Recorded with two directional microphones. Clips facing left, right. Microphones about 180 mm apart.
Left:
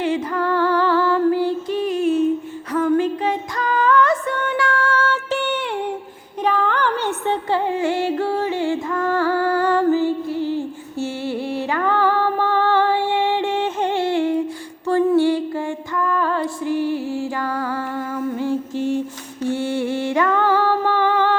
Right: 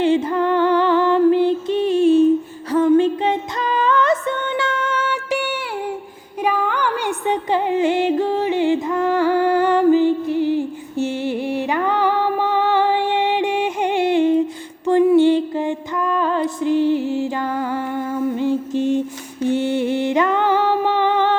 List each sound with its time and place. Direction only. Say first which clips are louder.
0.0 s music: right 4 dB; 25° right (ahead or behind)